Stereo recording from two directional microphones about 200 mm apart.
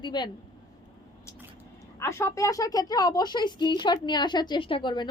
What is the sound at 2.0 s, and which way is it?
Speech, 15° left (ahead or behind).